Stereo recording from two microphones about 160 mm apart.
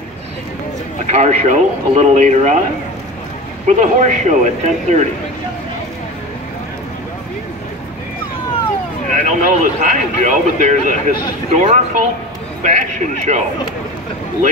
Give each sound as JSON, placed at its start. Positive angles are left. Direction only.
{"t": 1.0, "sound": "a man's voice", "side_deg": -45}
{"t": 3.6, "sound": "a man's voice", "side_deg": -50}
{"t": 9.1, "sound": "a man's voice", "side_deg": -50}